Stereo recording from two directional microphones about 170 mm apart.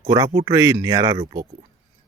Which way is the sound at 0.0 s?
25° right (ahead or behind).